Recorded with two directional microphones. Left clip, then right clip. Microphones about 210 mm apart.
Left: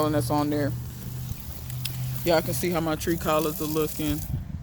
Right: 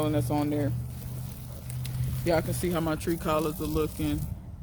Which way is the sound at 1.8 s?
25° left (ahead or behind).